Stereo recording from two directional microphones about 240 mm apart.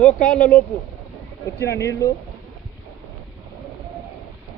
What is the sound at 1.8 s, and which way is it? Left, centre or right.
Speech, centre.